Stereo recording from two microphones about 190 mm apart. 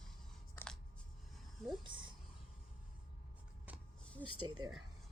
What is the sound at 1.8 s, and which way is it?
Speech, 25° right (ahead or behind).